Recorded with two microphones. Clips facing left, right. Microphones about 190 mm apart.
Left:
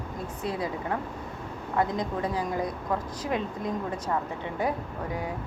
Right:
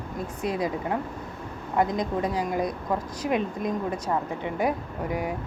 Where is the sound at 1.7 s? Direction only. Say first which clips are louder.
Right 3 dB; 15° right (ahead or behind).